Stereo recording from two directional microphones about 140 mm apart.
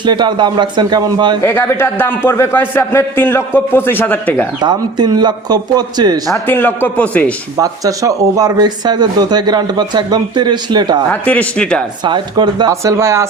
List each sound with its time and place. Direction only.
0.0 s a man's voice: 35° right (ahead or behind)
1.4 s a man's voice: 15° left (ahead or behind)
4.6 s a man's voice: 30° right (ahead or behind)
6.3 s a man's voice: 15° left (ahead or behind)
7.5 s speech: 25° right (ahead or behind)
11.1 s a man's voice: 10° left (ahead or behind)
12.0 s speech: 35° right (ahead or behind)